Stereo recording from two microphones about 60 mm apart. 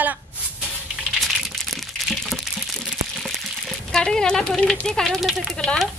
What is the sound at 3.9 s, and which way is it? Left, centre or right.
Speech, centre.